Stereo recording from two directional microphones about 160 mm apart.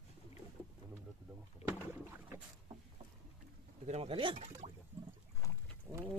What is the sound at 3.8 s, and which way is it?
Speech, 40° right (ahead or behind).